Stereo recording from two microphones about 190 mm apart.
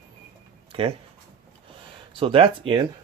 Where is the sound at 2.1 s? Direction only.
30° right (ahead or behind).